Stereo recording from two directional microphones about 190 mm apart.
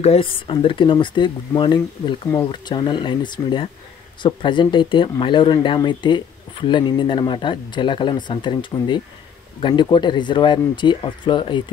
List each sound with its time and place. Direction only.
0.0 s speech: 30° left (ahead or behind)